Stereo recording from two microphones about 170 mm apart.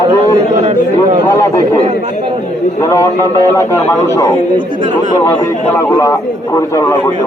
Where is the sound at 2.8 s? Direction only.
15° left (ahead or behind).